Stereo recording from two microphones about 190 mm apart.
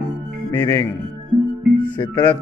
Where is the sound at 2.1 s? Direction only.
10° left (ahead or behind).